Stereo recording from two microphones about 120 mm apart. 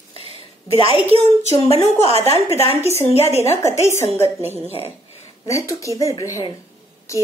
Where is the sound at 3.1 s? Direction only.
60° left (ahead or behind).